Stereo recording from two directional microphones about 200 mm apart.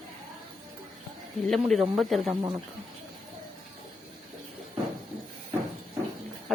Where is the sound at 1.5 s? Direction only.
Centre (ahead or behind).